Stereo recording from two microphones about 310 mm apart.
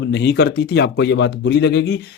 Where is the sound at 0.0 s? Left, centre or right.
Left.